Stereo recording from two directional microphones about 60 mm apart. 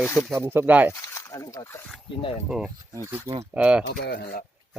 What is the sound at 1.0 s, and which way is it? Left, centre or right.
Snake, left.